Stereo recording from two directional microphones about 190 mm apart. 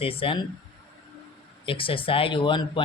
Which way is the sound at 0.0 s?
30° left (ahead or behind).